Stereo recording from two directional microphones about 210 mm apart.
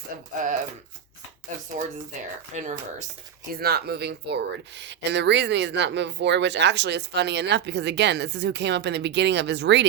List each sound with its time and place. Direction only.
0.4 s speech: 40° right (ahead or behind)
2.6 s speech: 35° right (ahead or behind)
3.5 s speech: 45° right (ahead or behind)